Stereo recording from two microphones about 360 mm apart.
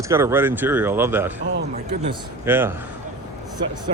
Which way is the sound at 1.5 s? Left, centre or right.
Right.